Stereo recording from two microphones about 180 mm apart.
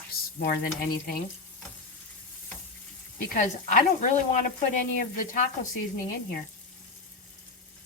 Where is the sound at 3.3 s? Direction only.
45° left (ahead or behind).